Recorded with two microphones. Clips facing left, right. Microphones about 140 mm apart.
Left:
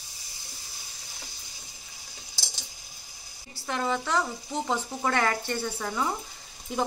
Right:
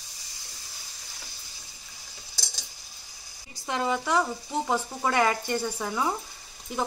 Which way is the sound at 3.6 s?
15° right (ahead or behind).